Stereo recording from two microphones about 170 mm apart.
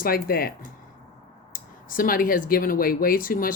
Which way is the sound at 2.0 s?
55° left (ahead or behind).